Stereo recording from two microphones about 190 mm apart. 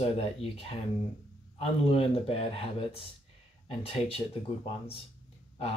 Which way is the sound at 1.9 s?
30° left (ahead or behind).